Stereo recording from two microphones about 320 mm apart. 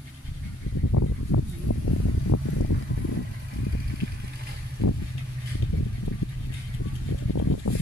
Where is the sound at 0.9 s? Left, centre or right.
Left.